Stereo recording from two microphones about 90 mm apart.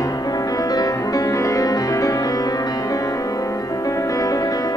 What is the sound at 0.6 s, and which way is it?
Music, 45° left (ahead or behind).